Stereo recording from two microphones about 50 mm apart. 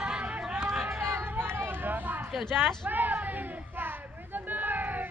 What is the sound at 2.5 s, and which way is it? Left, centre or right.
Speech, centre.